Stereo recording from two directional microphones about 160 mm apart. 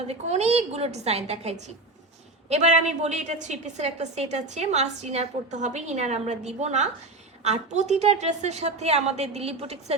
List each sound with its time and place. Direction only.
0.1 s a woman's voice: 40° right (ahead or behind)